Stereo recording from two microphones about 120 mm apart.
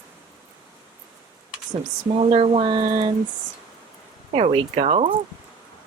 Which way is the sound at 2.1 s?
55° right (ahead or behind).